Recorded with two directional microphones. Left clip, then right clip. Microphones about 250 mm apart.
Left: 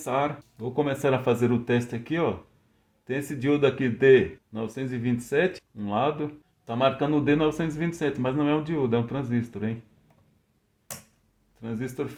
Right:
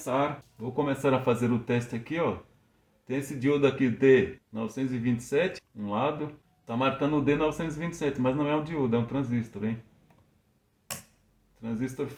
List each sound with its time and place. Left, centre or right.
0.8 s speech: left
11.6 s speech: left